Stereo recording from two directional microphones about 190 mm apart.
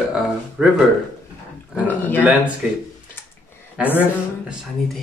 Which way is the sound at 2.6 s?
5° right (ahead or behind).